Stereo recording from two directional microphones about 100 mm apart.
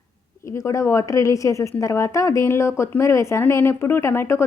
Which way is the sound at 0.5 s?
30° left (ahead or behind).